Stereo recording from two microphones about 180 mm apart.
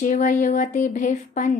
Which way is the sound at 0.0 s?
45° left (ahead or behind).